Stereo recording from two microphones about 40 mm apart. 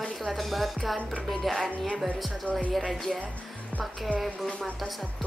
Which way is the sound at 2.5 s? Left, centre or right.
Left.